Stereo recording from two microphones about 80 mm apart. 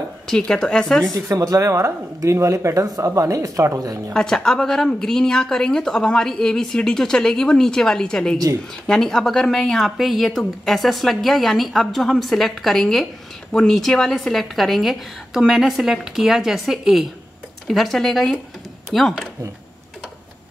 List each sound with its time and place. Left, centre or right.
0.3 s speech: centre
1.1 s speech: right
4.1 s speech: centre